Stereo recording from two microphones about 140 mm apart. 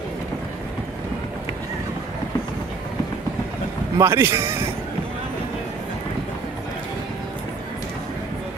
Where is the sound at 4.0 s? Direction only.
20° right (ahead or behind).